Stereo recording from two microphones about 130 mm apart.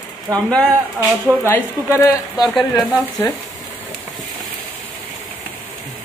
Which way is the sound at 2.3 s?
Centre (ahead or behind).